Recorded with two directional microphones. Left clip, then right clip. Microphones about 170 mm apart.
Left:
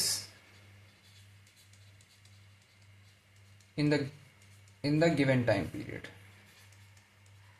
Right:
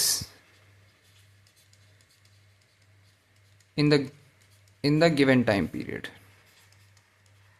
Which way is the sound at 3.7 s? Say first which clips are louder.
Right 7 dB; 55° right (ahead or behind).